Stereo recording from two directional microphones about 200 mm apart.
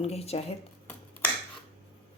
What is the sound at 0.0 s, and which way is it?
Speech, 30° left (ahead or behind).